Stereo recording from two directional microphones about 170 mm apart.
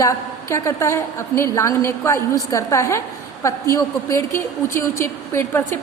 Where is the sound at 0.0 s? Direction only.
20° left (ahead or behind).